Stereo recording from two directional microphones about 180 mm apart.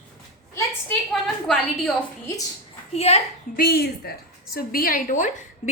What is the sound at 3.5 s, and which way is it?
A woman's voice, 55° left (ahead or behind).